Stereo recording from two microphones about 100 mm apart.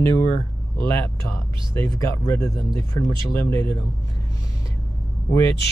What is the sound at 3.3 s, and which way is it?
Speech, 25° left (ahead or behind).